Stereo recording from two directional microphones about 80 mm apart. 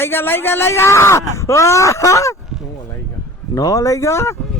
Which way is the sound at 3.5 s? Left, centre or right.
Left.